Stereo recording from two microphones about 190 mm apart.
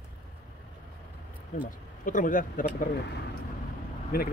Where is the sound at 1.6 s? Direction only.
45° left (ahead or behind).